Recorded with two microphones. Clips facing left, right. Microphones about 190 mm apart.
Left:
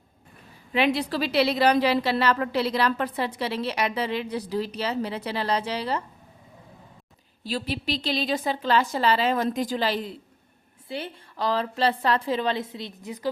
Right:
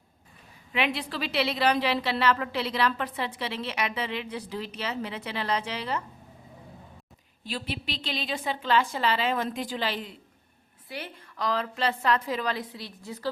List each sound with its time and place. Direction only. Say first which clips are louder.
0.7 s a woman's voice: left 6 dB; 40° left (ahead or behind)
7.4 s a woman's voice: left 5 dB; 40° left (ahead or behind)
10.8 s a woman's voice: left 5 dB; 25° left (ahead or behind)